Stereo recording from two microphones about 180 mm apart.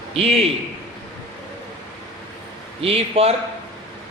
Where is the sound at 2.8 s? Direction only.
35° right (ahead or behind).